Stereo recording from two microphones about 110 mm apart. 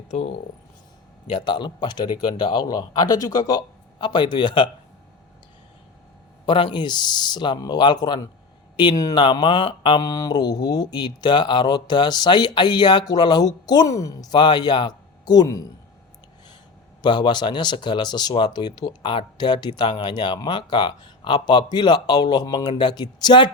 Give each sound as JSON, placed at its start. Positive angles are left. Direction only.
{"t": 1.3, "sound": "speech", "side_deg": 45}
{"t": 6.4, "sound": "speech", "side_deg": 45}
{"t": 10.0, "sound": "speech", "side_deg": 35}
{"t": 17.0, "sound": "speech", "side_deg": 45}